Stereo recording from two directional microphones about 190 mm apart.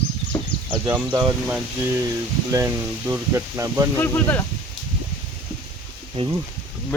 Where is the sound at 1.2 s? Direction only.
Centre (ahead or behind).